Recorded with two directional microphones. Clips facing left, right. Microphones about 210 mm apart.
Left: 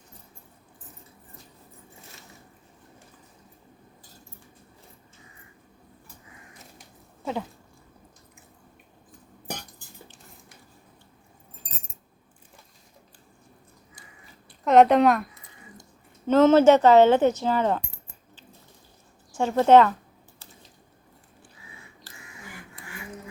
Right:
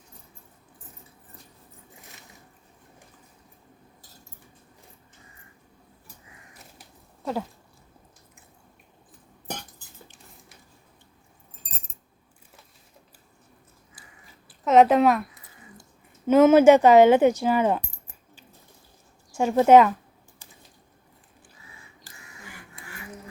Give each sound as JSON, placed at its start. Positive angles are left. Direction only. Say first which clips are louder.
{"t": 11.6, "sound": "keys jangling", "louder": "right 1 dB", "side_deg": -35}
{"t": 14.6, "sound": "a woman's voice", "louder": "even", "side_deg": 0}
{"t": 19.3, "sound": "a woman's voice", "louder": "right 1 dB", "side_deg": -10}
{"t": 20.4, "sound": "a sound", "louder": "left 2 dB", "side_deg": -15}